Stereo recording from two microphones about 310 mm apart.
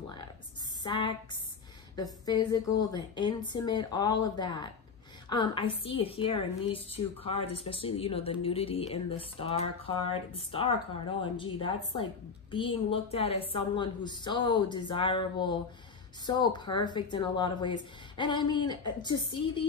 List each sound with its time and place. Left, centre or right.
0.8 s a woman's voice: centre